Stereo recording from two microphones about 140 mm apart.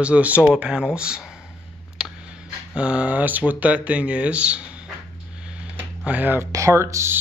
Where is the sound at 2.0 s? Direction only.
5° right (ahead or behind).